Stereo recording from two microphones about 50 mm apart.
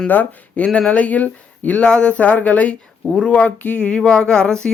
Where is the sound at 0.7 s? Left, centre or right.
Left.